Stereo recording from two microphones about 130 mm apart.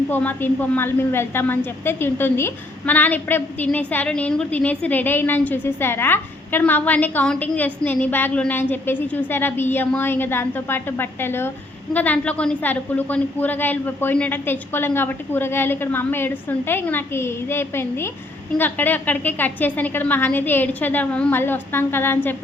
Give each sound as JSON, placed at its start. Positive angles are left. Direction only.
{"t": 0.1, "sound": "a woman's voice", "side_deg": 15}